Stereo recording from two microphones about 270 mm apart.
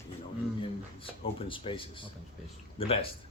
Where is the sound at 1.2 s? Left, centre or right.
Centre.